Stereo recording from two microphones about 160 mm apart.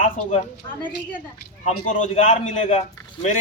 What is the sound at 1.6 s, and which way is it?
Speech, 50° left (ahead or behind).